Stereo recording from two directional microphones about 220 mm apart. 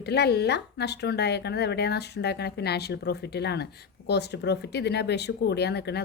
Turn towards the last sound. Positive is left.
turn(degrees=50)  # may be behind; listen again after turning